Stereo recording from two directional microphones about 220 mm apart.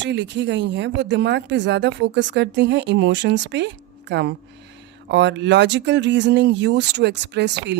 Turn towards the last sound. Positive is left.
turn(degrees=-50)  # may be behind; listen again after turning